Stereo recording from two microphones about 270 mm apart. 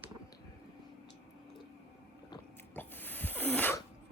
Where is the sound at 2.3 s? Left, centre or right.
Centre.